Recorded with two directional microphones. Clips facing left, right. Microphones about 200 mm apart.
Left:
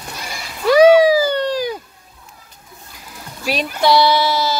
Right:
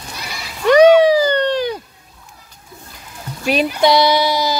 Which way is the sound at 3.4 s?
Centre (ahead or behind).